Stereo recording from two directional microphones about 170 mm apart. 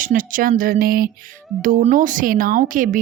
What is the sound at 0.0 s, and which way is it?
A woman's voice, 55° right (ahead or behind).